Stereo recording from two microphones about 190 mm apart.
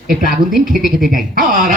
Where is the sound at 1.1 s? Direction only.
45° right (ahead or behind).